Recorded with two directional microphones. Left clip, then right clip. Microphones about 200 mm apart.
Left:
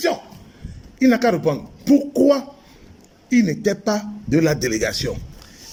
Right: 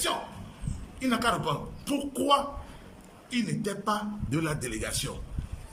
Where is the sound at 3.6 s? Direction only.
30° left (ahead or behind).